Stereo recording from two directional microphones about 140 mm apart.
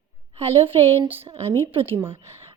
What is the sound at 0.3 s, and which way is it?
A woman's voice, 45° right (ahead or behind).